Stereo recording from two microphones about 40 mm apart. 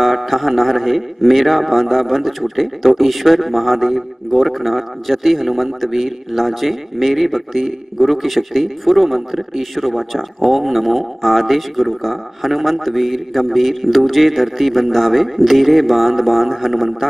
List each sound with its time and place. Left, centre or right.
0.0 s a man's voice: centre